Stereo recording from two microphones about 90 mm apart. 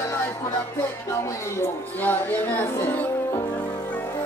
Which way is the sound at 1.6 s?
20° left (ahead or behind).